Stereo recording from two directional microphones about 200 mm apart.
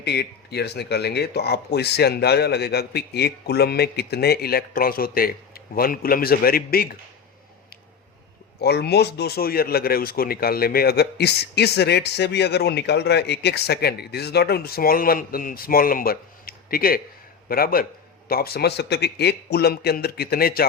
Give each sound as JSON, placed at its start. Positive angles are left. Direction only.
{"t": 0.0, "sound": "speech", "side_deg": 55}
{"t": 8.6, "sound": "speech", "side_deg": 55}